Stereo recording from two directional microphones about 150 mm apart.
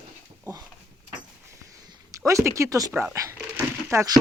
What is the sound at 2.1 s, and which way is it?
Speech, 20° right (ahead or behind).